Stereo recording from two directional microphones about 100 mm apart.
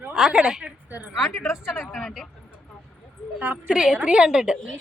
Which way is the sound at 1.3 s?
25° left (ahead or behind).